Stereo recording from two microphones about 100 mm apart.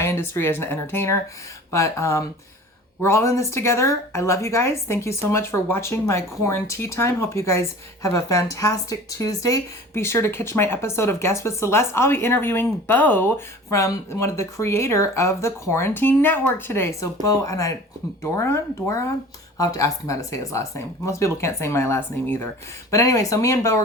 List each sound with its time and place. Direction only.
0.0 s speech: 25° left (ahead or behind)